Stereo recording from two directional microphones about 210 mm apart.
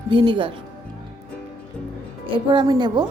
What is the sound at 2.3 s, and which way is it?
Speech, 25° right (ahead or behind).